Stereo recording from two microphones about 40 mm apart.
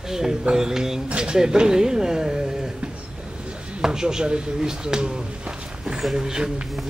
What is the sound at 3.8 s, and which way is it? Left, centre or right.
Speech, centre.